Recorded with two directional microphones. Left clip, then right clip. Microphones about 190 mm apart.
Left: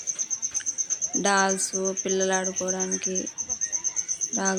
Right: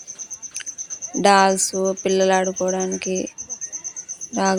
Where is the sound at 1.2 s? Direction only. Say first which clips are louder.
Right 9 dB; 40° right (ahead or behind).